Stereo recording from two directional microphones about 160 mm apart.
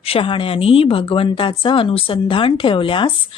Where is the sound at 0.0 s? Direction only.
35° left (ahead or behind).